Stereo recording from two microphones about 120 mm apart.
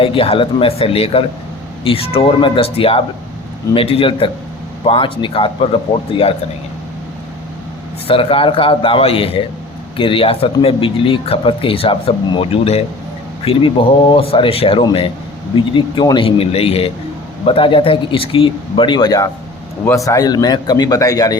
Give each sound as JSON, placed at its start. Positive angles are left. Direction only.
{"t": 0.0, "sound": "speech", "side_deg": 50}
{"t": 8.0, "sound": "a man's voice", "side_deg": 50}